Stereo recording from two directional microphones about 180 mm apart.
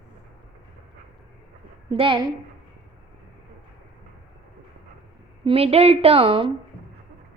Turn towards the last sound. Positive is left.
turn(degrees=-30)  # may be behind; listen again after turning